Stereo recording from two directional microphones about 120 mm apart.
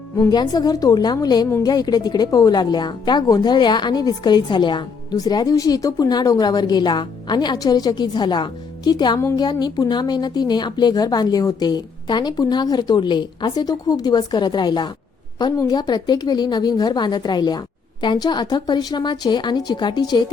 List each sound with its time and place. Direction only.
0.2 s a woman's voice: 30° left (ahead or behind)